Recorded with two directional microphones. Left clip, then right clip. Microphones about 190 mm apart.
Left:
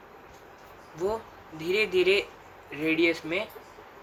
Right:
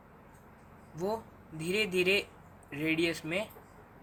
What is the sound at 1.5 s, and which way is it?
Speech, 30° right (ahead or behind).